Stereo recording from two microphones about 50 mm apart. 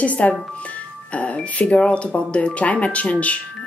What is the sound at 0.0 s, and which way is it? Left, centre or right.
Speech, left.